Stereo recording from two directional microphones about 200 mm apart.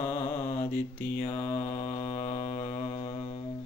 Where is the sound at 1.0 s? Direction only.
45° left (ahead or behind).